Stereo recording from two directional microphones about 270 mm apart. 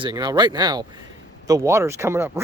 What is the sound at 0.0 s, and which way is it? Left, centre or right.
Speech, centre.